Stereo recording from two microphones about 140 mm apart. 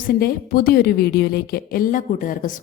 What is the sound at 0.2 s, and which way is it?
A woman's voice, 90° left.